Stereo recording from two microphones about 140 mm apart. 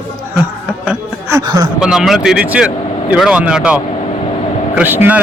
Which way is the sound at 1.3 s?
25° right (ahead or behind).